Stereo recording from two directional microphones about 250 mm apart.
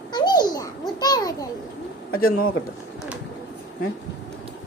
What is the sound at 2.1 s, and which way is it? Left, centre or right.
Speech, left.